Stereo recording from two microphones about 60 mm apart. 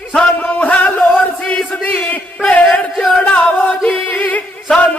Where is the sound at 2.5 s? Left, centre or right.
Left.